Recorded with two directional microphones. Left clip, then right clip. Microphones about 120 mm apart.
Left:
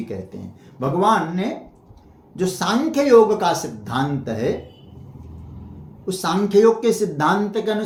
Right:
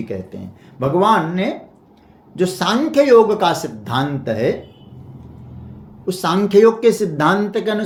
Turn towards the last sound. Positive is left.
turn(degrees=-45)  # may be behind; listen again after turning